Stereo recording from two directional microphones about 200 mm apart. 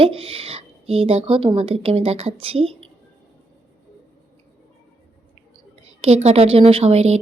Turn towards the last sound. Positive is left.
turn(degrees=-30)  # may be behind; listen again after turning